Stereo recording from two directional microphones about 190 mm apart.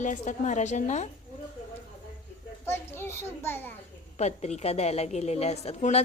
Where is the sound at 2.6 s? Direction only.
10° left (ahead or behind).